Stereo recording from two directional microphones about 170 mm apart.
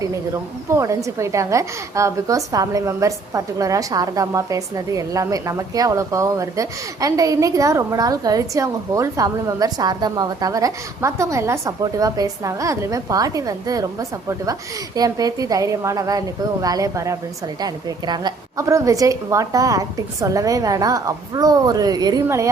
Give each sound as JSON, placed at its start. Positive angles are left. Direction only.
{"t": 0.7, "sound": "a woman's voice", "side_deg": -20}